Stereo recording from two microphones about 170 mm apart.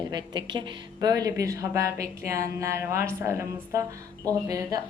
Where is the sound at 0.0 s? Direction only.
25° right (ahead or behind).